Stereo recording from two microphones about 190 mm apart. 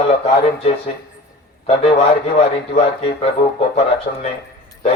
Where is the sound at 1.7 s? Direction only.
30° left (ahead or behind).